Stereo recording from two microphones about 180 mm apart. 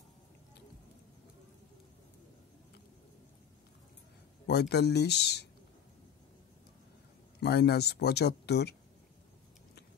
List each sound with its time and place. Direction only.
4.5 s speech: 65° left (ahead or behind)
7.3 s speech: 65° left (ahead or behind)